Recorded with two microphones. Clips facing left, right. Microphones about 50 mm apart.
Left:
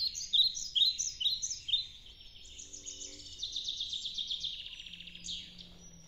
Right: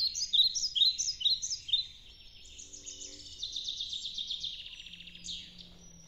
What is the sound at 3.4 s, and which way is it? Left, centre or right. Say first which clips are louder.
Bird vocalization: even; left.